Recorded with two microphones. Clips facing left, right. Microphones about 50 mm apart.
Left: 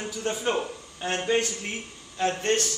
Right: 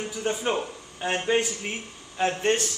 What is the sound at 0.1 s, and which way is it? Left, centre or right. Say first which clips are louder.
A man's voice: even; centre.